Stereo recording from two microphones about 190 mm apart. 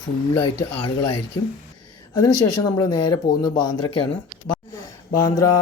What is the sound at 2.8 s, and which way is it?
Speech, 20° left (ahead or behind).